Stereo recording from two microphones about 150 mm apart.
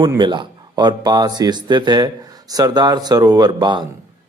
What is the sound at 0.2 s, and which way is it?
Speech, 30° right (ahead or behind).